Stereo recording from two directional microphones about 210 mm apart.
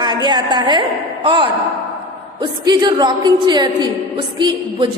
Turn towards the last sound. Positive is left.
turn(degrees=-20)  # may be behind; listen again after turning